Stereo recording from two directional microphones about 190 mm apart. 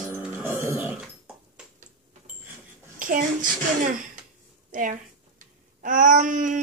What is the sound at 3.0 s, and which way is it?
A child's voice, 45° right (ahead or behind).